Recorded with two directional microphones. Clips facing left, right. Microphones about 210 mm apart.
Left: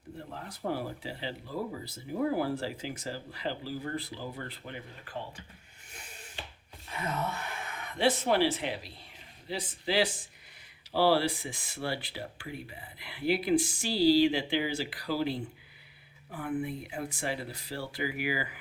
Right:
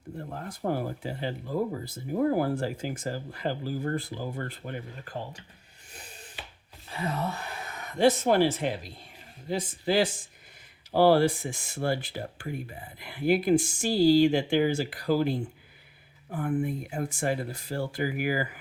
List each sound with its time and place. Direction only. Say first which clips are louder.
0.3 s speech: right 4 dB; 50° right (ahead or behind)
6.8 s speech: right 3 dB; 30° right (ahead or behind)